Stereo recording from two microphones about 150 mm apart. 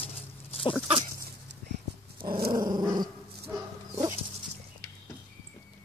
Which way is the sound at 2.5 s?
30° right (ahead or behind).